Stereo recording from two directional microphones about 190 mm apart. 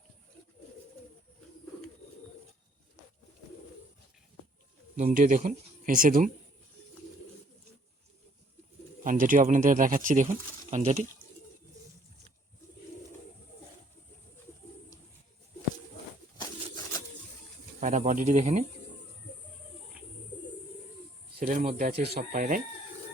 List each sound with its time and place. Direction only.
4.9 s speech: 45° right (ahead or behind)
9.0 s speech: 45° right (ahead or behind)
17.7 s speech: 40° right (ahead or behind)
21.3 s speech: 45° right (ahead or behind)